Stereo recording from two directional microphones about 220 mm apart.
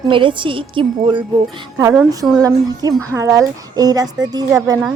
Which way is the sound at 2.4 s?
15° right (ahead or behind).